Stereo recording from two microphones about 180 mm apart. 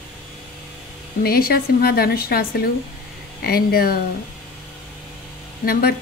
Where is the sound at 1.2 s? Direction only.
60° left (ahead or behind).